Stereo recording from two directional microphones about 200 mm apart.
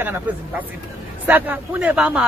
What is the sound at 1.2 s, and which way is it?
Speech, 10° right (ahead or behind).